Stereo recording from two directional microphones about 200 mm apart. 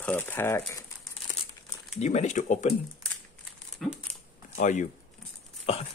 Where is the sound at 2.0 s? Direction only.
35° left (ahead or behind).